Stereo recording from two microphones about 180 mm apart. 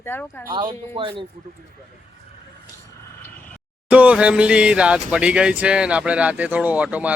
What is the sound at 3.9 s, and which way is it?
Speech, 10° right (ahead or behind).